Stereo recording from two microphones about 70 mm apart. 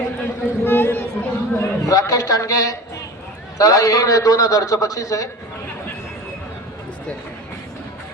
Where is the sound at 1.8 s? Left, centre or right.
Left.